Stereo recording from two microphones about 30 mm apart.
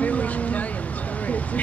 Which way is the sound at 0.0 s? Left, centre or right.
Left.